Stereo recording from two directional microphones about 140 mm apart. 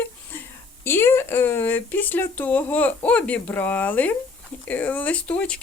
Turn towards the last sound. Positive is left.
turn(degrees=10)  # may be behind; listen again after turning